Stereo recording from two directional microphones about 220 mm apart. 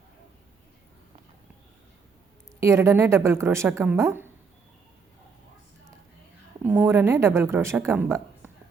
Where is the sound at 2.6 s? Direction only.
10° right (ahead or behind).